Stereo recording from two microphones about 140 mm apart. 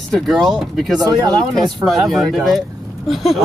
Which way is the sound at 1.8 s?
Centre (ahead or behind).